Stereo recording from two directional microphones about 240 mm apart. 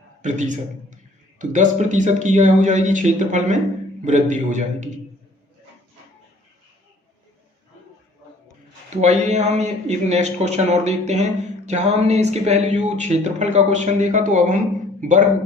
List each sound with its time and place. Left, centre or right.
0.2 s a man's voice: right
9.0 s a man's voice: right